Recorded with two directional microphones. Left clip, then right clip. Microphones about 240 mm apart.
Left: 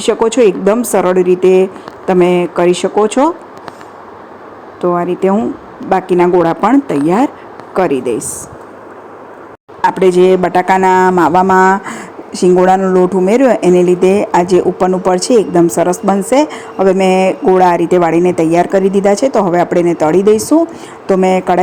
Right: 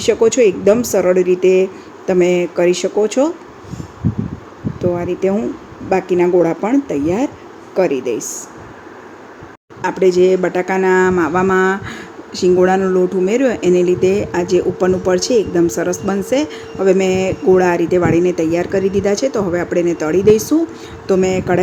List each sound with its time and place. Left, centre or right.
0.0 s a woman's voice: centre
4.8 s a woman's voice: centre
9.8 s a woman's voice: centre
11.9 s a woman's voice: centre